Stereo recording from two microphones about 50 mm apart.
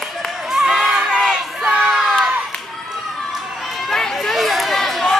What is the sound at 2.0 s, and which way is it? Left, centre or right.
Crowd, centre.